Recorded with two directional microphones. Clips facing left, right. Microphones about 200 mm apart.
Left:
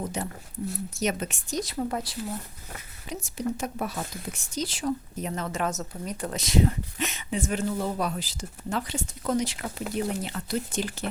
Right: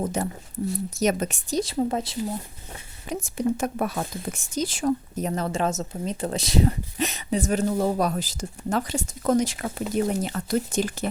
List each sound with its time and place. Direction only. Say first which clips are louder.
0.0 s a woman's voice: right 5 dB; 45° right (ahead or behind); by 2.3 s 25° right (ahead or behind)
3.1 s speech: right 5 dB; 50° right (ahead or behind)
5.3 s speech: right 4 dB; 30° right (ahead or behind)